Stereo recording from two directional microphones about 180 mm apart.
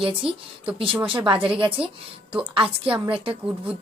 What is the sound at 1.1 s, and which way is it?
Speech, 30° right (ahead or behind).